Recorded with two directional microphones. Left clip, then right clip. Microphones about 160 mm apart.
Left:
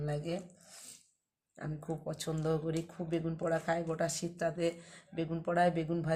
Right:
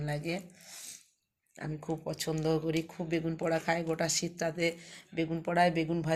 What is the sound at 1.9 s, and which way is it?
Speech, 10° right (ahead or behind).